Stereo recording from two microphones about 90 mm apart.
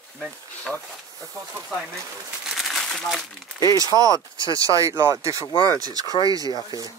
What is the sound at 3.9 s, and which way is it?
Speech, 50° left (ahead or behind).